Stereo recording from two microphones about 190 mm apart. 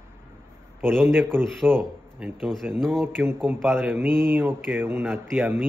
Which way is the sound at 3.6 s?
Centre (ahead or behind).